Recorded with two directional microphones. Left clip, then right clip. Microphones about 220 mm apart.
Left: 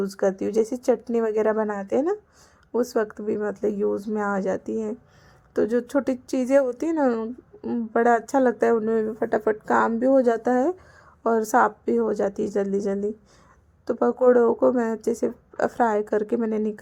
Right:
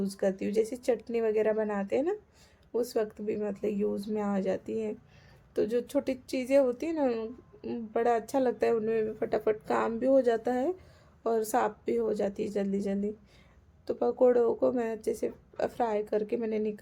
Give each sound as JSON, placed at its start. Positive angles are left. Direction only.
{"t": 0.0, "sound": "speech", "side_deg": 15}